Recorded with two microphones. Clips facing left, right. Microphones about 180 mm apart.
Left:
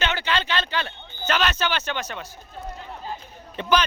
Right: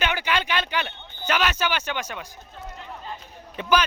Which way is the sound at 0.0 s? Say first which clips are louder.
Even; 10° right (ahead or behind).